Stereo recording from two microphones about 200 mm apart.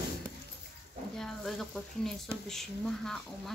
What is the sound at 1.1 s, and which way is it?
Speech, centre (ahead or behind).